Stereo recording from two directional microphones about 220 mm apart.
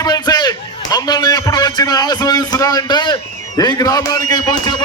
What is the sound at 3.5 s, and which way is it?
A man's voice, 15° left (ahead or behind).